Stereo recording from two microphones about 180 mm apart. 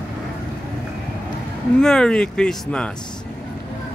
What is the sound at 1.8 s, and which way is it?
Speech, 5° left (ahead or behind).